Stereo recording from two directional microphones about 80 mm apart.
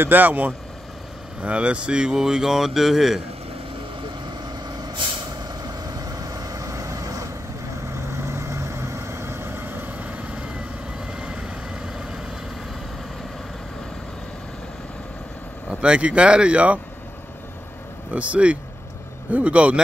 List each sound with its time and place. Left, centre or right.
0.0 s speech: right; by 3.2 s centre
4.5 s vehicle: right
7.9 s vehicle: right; by 12.3 s centre
15.7 s speech: centre
18.1 s speech: centre